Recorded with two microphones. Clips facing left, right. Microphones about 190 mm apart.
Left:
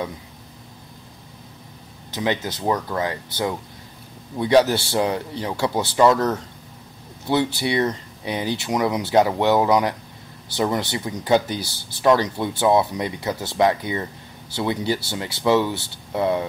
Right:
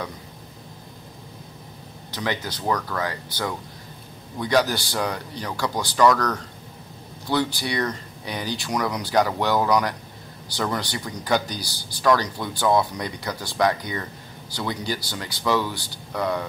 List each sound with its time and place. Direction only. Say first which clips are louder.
2.1 s speech: left 4 dB; 20° left (ahead or behind)